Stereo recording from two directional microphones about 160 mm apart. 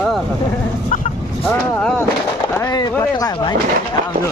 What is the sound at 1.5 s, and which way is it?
Speech, 10° left (ahead or behind).